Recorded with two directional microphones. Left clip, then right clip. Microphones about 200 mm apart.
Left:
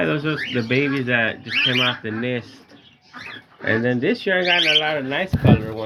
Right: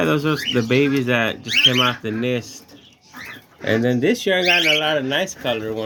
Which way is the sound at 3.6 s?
35° right (ahead or behind).